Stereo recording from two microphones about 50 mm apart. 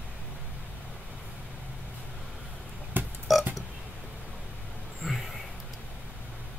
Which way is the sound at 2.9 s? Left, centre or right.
Right.